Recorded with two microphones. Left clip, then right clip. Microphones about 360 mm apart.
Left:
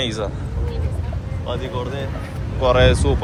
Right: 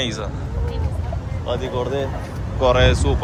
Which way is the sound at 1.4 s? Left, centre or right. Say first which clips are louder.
Right 3 dB; centre.